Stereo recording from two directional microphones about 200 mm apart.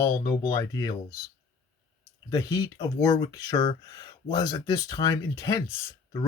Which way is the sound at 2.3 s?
15° left (ahead or behind).